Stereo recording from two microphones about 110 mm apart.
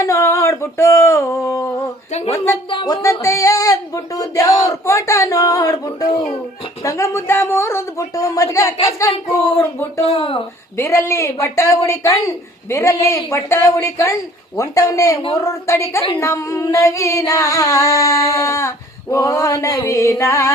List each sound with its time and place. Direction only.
0.0 s a sound: 25° left (ahead or behind)
2.3 s music: 20° left (ahead or behind)
2.8 s a sound: 30° left (ahead or behind)
4.6 s music: 30° left (ahead or behind)
10.0 s speech: 60° left (ahead or behind)
10.8 s music: 25° left (ahead or behind)